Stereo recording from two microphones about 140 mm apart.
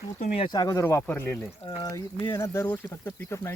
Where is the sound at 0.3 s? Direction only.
30° left (ahead or behind).